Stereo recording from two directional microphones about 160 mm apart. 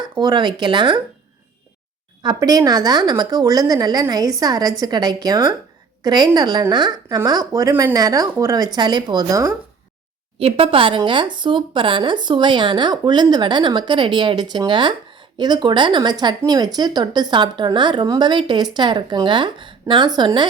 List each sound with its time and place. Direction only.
0.2 s speech: 25° right (ahead or behind)
2.2 s speech: 25° right (ahead or behind)
10.3 s speech: 35° right (ahead or behind)